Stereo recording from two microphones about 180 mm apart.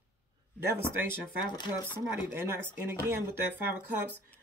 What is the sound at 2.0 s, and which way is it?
Speech, 10° right (ahead or behind).